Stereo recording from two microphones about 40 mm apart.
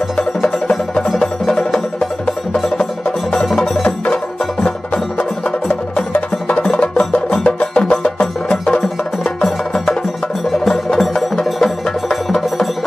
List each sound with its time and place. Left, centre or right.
0.4 s music: left
1.0 s music: centre
6.1 s music: left
10.6 s music: centre